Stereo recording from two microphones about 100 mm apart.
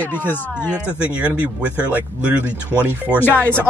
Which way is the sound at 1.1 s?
10° right (ahead or behind).